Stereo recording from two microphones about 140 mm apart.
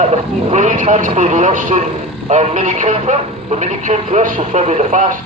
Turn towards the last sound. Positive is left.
turn(degrees=-60)  # may be behind; listen again after turning